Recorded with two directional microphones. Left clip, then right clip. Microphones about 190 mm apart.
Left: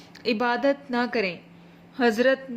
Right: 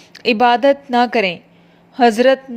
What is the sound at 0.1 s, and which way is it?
A woman's voice, 40° right (ahead or behind).